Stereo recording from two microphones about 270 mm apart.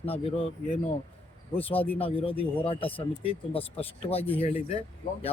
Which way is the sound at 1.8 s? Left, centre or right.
Centre.